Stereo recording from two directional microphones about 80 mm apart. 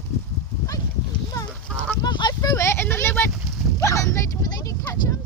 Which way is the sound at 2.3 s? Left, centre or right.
Left.